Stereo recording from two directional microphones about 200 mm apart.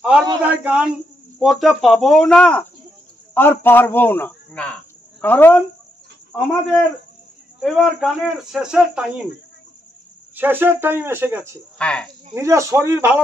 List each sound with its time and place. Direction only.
0.0 s a man's voice: 5° right (ahead or behind)
7.6 s a man's voice: centre (ahead or behind)
10.3 s speech: 10° right (ahead or behind)
11.8 s a man's voice: 5° left (ahead or behind)
12.4 s speech: 15° right (ahead or behind)